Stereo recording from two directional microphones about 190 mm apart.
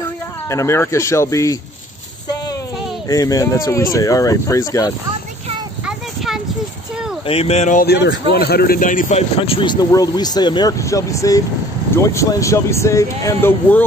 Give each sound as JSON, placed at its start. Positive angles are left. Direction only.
{"t": 0.5, "sound": "speech", "side_deg": 15}
{"t": 3.1, "sound": "speech", "side_deg": 20}
{"t": 5.9, "sound": "a sound", "side_deg": -5}
{"t": 7.2, "sound": "speech", "side_deg": 30}
{"t": 7.8, "sound": "speech", "side_deg": 60}
{"t": 9.4, "sound": "speech", "side_deg": 25}